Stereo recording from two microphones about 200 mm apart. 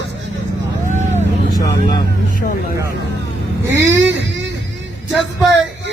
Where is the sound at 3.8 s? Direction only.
65° right (ahead or behind).